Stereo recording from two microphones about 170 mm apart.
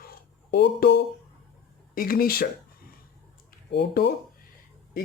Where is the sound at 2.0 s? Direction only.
60° left (ahead or behind).